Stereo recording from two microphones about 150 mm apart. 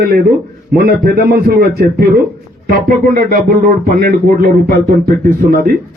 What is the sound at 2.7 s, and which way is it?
Speech, 75° right (ahead or behind).